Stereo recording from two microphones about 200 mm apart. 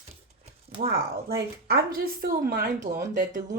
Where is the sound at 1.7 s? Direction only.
50° right (ahead or behind).